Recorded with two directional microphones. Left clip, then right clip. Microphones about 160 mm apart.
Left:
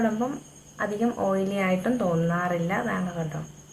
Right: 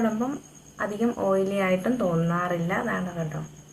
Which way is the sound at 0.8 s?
15° right (ahead or behind).